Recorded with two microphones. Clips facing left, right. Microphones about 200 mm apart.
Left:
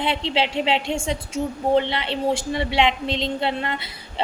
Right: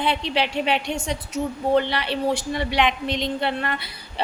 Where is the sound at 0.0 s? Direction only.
25° left (ahead or behind).